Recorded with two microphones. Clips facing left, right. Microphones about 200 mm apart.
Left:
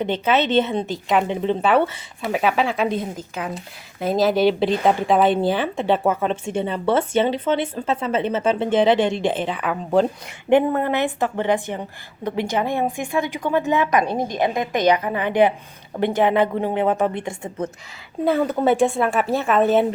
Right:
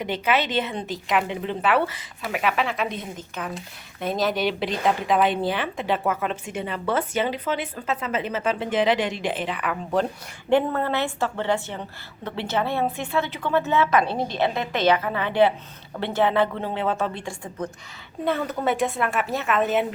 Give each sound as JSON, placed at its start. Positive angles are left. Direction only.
{"t": 0.0, "sound": "a woman's voice", "side_deg": 25}
{"t": 4.0, "sound": "speech", "side_deg": 30}
{"t": 10.5, "sound": "a woman's voice", "side_deg": 15}